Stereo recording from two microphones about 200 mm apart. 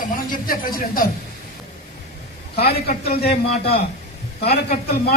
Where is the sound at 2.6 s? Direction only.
50° left (ahead or behind).